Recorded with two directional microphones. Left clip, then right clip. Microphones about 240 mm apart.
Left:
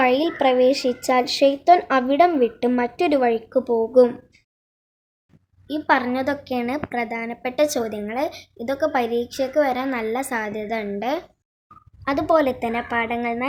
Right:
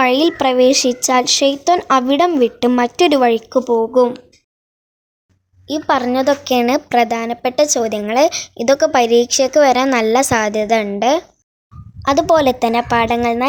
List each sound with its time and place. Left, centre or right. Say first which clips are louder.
0.0 s a woman's voice: right 5 dB; right
3.6 s speech: right 2 dB; right
5.6 s a woman's voice: right 4 dB; right